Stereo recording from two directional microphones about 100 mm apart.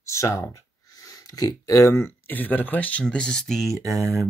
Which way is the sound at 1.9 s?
20° left (ahead or behind).